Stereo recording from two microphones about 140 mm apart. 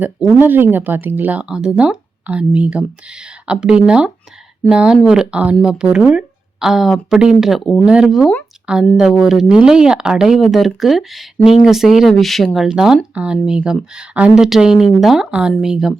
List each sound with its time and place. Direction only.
0.3 s speech: 15° right (ahead or behind)